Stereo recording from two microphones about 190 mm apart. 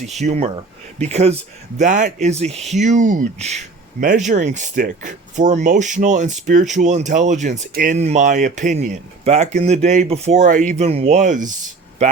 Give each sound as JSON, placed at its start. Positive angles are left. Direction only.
{"t": 0.2, "sound": "speech", "side_deg": -35}